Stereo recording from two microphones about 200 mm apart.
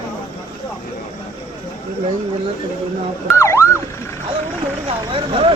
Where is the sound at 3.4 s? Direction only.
15° left (ahead or behind).